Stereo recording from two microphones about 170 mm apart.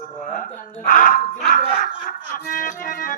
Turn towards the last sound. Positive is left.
turn(degrees=55)  # may be behind; listen again after turning